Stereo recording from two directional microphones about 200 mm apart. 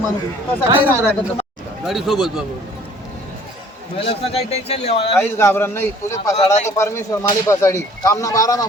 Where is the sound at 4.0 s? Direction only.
30° left (ahead or behind).